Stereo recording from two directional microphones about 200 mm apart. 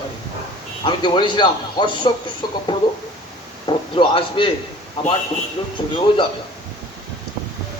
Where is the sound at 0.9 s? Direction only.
25° left (ahead or behind).